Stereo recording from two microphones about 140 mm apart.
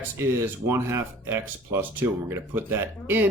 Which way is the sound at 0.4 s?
20° right (ahead or behind).